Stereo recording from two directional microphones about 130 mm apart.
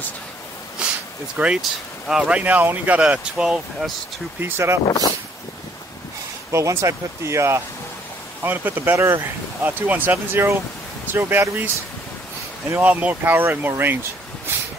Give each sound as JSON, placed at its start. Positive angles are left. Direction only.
{"t": 0.8, "sound": "a sound", "side_deg": -10}
{"t": 1.4, "sound": "speech", "side_deg": -5}
{"t": 4.4, "sound": "speech", "side_deg": -20}
{"t": 4.8, "sound": "speech", "side_deg": 30}
{"t": 6.5, "sound": "speech", "side_deg": -20}